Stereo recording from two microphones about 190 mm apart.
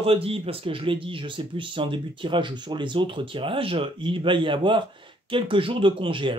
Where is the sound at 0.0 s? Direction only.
30° right (ahead or behind).